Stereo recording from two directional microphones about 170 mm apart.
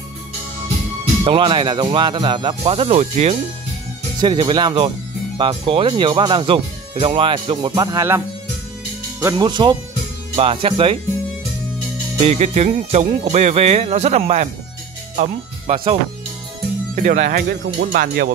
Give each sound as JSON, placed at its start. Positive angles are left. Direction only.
{"t": 1.2, "sound": "speech", "side_deg": -30}
{"t": 4.2, "sound": "speech", "side_deg": -25}
{"t": 9.2, "sound": "speech", "side_deg": -25}
{"t": 12.2, "sound": "speech", "side_deg": -40}
{"t": 15.7, "sound": "speech", "side_deg": -30}
{"t": 16.9, "sound": "speech", "side_deg": -50}
{"t": 17.5, "sound": "speech", "side_deg": -75}